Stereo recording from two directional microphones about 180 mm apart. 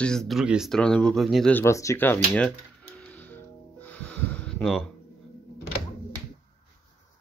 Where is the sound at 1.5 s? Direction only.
15° left (ahead or behind).